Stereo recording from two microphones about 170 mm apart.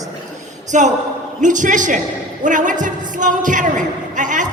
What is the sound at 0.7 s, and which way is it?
A woman's voice, 45° right (ahead or behind).